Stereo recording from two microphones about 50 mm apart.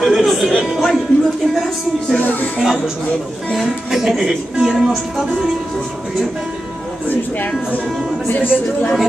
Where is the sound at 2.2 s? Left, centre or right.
Left.